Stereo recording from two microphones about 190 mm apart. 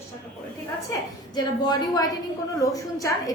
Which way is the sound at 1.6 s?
20° left (ahead or behind).